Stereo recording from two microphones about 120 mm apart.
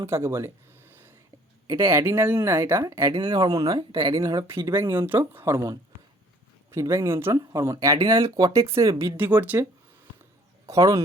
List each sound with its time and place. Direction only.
0.0 s speech: 25° right (ahead or behind)
3.1 s speech: 45° right (ahead or behind)
3.4 s speech: 30° right (ahead or behind)
3.8 s speech: 45° right (ahead or behind)
4.2 s speech: 30° right (ahead or behind)
4.7 s speech: 20° right (ahead or behind)
10.7 s speech: 25° right (ahead or behind)